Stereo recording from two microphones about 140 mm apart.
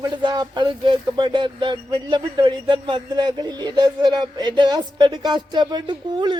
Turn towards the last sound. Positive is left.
turn(degrees=-30)  # may be behind; listen again after turning